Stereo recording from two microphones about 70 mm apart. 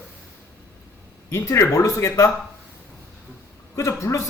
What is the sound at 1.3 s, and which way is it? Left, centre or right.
Speech, left.